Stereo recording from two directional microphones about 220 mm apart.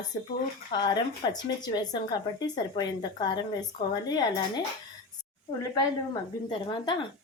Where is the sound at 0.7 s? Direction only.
20° left (ahead or behind).